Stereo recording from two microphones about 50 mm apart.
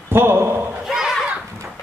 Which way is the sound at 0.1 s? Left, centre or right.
Right.